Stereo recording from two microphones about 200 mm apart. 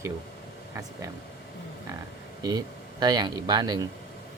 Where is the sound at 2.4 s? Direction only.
20° right (ahead or behind).